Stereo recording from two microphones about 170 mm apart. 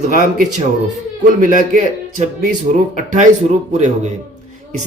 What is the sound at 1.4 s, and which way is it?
Speech, 50° right (ahead or behind).